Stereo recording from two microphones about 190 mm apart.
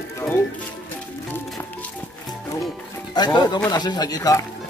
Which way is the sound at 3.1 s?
20° left (ahead or behind).